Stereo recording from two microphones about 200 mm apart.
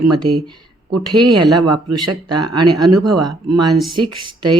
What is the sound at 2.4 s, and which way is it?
Speech, centre (ahead or behind).